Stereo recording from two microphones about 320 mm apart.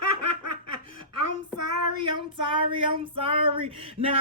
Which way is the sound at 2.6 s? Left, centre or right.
Centre.